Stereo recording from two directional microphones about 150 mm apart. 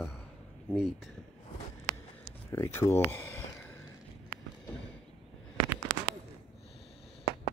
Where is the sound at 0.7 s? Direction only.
5° right (ahead or behind).